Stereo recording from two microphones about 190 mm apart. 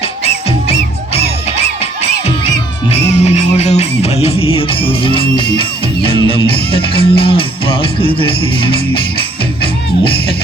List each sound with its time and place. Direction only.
1.5 s music: 35° left (ahead or behind)
9.6 s music: 25° left (ahead or behind)